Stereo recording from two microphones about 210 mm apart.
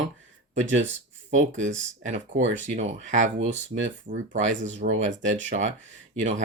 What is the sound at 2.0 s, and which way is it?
Speech, 35° right (ahead or behind).